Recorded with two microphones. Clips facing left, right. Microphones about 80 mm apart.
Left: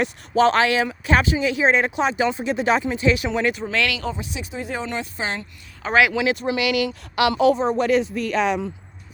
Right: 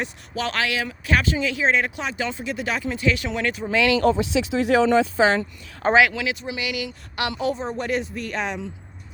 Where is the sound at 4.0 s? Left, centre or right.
Right.